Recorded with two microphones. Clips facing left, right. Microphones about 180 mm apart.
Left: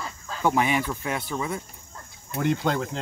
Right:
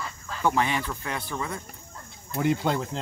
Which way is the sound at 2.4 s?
5° right (ahead or behind).